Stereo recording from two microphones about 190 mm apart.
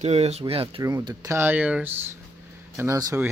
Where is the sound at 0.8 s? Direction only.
20° right (ahead or behind).